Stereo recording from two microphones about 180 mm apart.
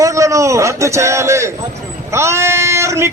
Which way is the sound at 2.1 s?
15° right (ahead or behind).